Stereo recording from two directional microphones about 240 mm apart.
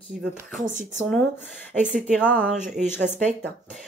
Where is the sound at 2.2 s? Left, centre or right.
Centre.